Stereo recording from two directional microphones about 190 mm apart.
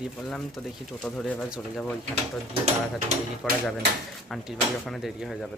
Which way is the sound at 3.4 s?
Centre (ahead or behind).